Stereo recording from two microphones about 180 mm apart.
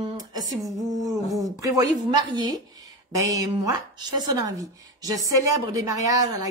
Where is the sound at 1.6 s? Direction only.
20° right (ahead or behind).